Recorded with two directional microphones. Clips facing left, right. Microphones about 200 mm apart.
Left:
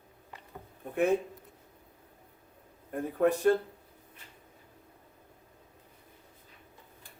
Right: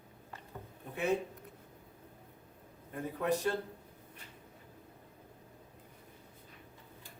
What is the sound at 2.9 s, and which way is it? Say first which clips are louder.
Speech: left 6 dB; 50° left (ahead or behind).